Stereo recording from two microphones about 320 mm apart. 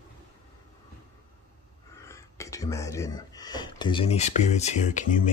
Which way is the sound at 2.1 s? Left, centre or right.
Centre.